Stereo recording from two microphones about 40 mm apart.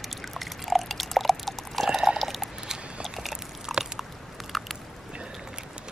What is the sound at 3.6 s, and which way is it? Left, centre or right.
Biting, centre.